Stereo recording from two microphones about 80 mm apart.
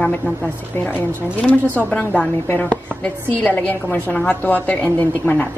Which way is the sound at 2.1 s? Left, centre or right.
Left.